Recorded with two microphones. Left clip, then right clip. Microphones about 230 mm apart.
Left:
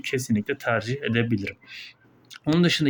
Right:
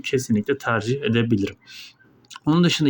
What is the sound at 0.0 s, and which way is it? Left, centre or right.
Speech, centre.